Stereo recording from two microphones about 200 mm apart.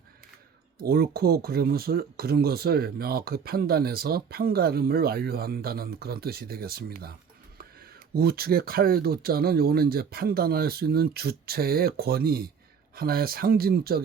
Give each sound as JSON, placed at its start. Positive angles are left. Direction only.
{"t": 0.8, "sound": "speech", "side_deg": -50}
{"t": 8.1, "sound": "speech", "side_deg": -50}